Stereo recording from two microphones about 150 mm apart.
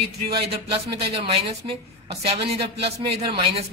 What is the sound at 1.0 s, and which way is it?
Speech, 45° right (ahead or behind).